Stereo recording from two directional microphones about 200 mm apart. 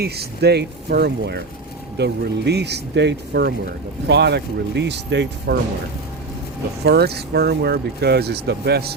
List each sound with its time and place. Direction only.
0.0 s speech: 55° right (ahead or behind)
6.8 s speech: 55° right (ahead or behind)